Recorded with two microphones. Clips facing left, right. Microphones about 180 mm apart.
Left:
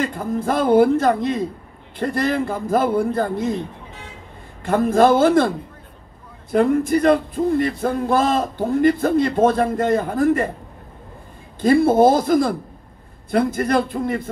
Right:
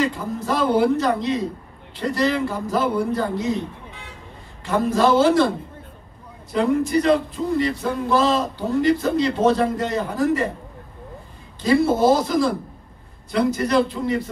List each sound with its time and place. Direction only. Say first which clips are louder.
0.0 s speech: left 1 dB; 55° left (ahead or behind)
4.6 s speech: left 3 dB; 55° left (ahead or behind)
6.5 s speech: left 2 dB; 55° left (ahead or behind)
11.6 s speech: left 3 dB; 55° left (ahead or behind)